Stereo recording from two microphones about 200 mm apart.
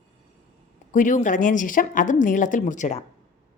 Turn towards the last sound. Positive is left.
turn(degrees=40)  # may be behind; listen again after turning